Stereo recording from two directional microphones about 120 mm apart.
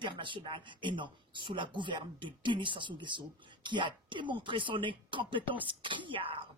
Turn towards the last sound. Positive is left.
turn(degrees=-45)  # may be behind; listen again after turning